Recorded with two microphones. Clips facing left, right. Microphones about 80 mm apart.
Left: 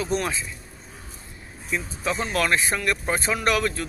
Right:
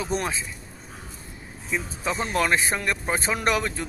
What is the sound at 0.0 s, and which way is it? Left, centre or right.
Speech, right.